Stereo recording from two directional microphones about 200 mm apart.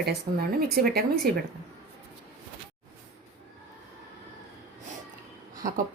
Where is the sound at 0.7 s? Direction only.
50° right (ahead or behind).